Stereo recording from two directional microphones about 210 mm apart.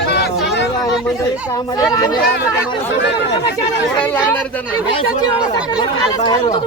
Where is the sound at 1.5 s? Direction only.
15° left (ahead or behind).